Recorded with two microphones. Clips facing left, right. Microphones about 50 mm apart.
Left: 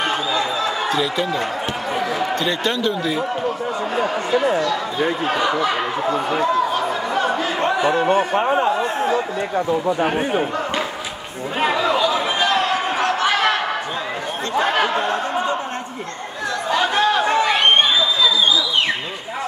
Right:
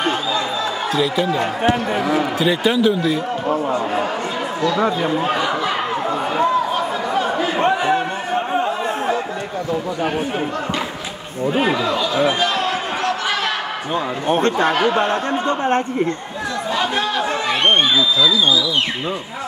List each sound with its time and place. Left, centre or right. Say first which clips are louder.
2.4 s a man's voice: right 4 dB; centre
5.2 s a man's voice: even; centre
8.1 s speech: left 5 dB; left
9.7 s speech: left 2 dB; left
14.3 s a man's voice: right 4 dB; right